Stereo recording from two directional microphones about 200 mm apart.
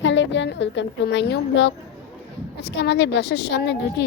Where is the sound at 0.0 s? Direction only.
65° left (ahead or behind).